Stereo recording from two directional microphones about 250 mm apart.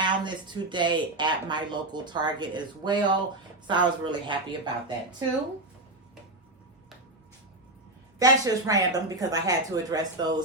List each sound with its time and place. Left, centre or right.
0.0 s speech: centre
8.2 s speech: centre